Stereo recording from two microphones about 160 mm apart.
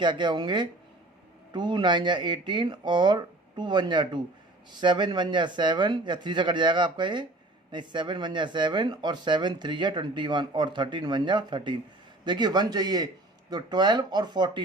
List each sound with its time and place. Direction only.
0.0 s speech: 30° right (ahead or behind)